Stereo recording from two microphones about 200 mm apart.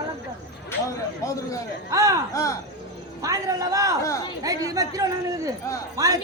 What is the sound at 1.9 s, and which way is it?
Speech, 15° right (ahead or behind).